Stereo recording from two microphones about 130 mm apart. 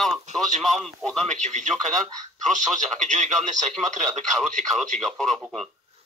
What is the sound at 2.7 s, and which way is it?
Speech, 75° right (ahead or behind).